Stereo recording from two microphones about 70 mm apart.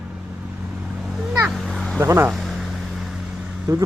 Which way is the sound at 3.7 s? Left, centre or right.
Right.